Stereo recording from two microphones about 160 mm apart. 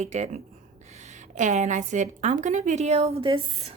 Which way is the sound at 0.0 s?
45° right (ahead or behind).